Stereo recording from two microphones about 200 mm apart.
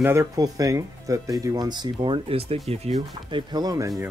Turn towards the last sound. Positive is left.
turn(degrees=-15)  # may be behind; listen again after turning